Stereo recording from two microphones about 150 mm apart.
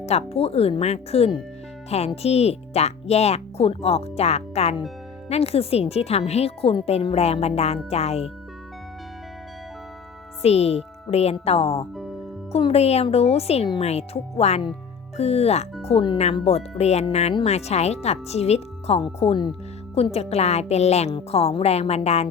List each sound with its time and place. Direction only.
0.0 s speech: 45° left (ahead or behind)
10.4 s speech: 45° left (ahead or behind)